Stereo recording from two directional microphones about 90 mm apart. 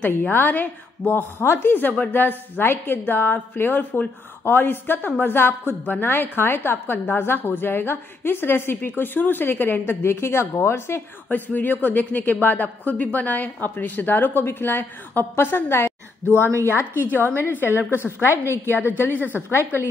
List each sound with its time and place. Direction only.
0.0 s a woman's voice: 20° left (ahead or behind)
11.2 s a woman's voice: 20° left (ahead or behind)